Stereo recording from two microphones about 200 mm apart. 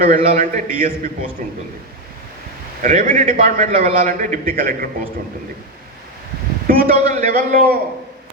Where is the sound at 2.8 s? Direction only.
40° right (ahead or behind).